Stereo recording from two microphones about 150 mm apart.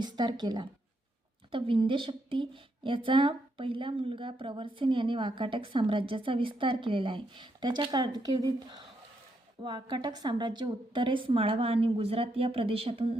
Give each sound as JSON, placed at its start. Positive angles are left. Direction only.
{"t": 0.0, "sound": "a woman's voice", "side_deg": -30}